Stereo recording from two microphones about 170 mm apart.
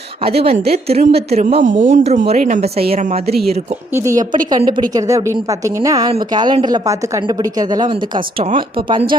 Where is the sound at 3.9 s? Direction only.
15° right (ahead or behind).